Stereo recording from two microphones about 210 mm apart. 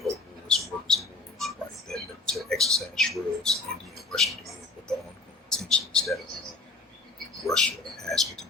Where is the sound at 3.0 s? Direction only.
Centre (ahead or behind).